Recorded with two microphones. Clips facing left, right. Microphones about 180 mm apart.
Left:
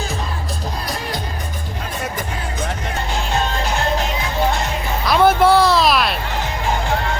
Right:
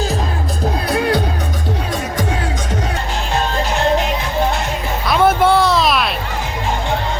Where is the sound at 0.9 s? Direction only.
65° right (ahead or behind).